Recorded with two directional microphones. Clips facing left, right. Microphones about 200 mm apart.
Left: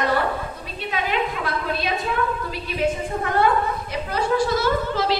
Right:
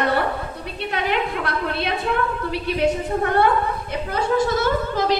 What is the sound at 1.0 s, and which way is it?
Speech, 65° right (ahead or behind).